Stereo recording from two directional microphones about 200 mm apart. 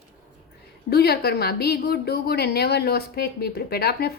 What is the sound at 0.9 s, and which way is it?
A woman's voice, 50° left (ahead or behind).